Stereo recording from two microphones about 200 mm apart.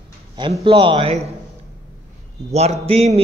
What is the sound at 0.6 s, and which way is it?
Speech, 25° right (ahead or behind).